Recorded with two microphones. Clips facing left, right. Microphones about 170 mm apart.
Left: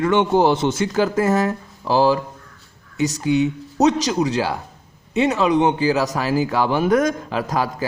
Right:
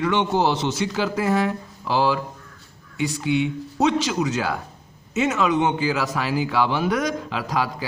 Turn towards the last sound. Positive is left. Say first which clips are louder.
# left 3 dB
turn(degrees=45)  # may be behind; listen again after turning